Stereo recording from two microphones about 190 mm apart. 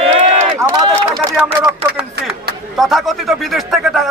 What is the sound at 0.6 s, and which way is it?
Speech, 15° right (ahead or behind).